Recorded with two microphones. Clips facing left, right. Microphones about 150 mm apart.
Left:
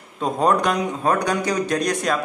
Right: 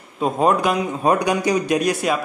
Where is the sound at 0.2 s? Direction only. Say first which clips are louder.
Right 1 dB; 5° right (ahead or behind).